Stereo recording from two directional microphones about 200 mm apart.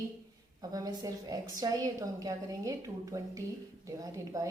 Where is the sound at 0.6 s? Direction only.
20° right (ahead or behind).